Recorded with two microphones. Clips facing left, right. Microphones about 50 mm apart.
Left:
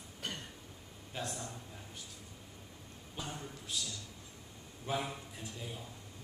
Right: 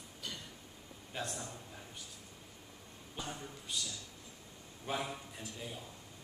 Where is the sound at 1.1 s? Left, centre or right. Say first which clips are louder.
Even; centre.